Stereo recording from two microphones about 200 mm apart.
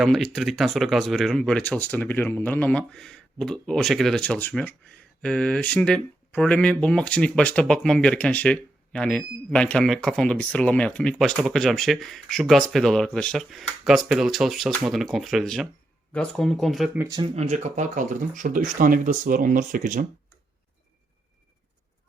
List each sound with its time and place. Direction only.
0.0 s speech: centre (ahead or behind)
17.0 s speech: 20° right (ahead or behind)
17.3 s speech: 35° right (ahead or behind)